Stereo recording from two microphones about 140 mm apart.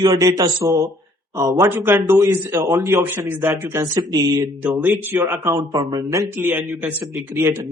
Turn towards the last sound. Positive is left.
turn(degrees=-20)  # may be behind; listen again after turning